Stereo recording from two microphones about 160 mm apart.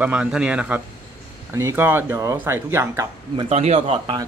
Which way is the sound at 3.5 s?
40° right (ahead or behind).